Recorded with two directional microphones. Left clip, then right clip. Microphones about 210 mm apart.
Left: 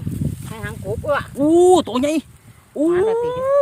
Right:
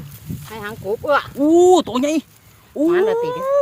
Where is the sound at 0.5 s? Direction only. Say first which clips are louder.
Right 4 dB; 50° right (ahead or behind).